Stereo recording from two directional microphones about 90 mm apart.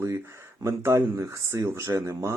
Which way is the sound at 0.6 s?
35° right (ahead or behind).